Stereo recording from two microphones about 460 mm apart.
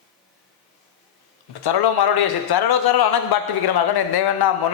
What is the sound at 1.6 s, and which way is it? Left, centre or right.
A man's voice, left.